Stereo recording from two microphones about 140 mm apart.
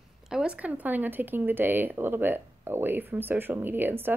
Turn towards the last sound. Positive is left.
turn(degrees=-15)  # may be behind; listen again after turning